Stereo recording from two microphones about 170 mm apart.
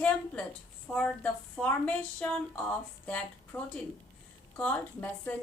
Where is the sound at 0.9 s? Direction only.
10° left (ahead or behind).